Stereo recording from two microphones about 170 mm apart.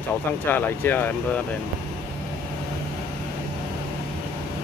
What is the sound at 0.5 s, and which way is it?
Speech, 10° left (ahead or behind).